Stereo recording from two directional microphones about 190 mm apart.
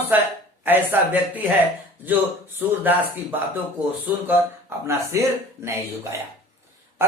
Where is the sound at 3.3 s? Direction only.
10° right (ahead or behind).